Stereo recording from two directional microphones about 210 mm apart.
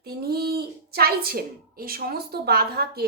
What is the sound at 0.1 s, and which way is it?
A woman's voice, 50° right (ahead or behind).